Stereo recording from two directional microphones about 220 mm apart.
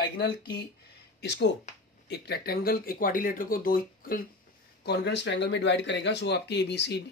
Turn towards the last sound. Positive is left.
turn(degrees=50)  # may be behind; listen again after turning